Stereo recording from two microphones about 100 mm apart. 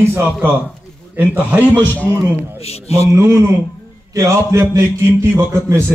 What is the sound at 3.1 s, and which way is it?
A man's voice, 30° right (ahead or behind).